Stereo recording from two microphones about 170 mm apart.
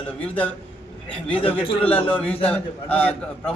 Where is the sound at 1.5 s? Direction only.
30° left (ahead or behind).